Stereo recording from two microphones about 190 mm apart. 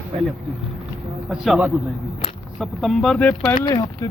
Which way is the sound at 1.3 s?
5° right (ahead or behind).